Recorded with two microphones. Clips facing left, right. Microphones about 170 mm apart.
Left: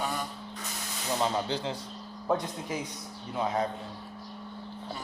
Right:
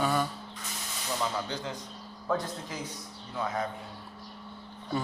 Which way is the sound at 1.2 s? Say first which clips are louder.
Left 4 dB; 30° left (ahead or behind).